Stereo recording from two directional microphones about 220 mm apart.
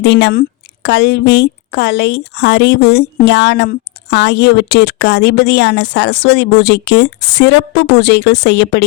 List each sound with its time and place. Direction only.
0.0 s a woman's voice: 50° left (ahead or behind)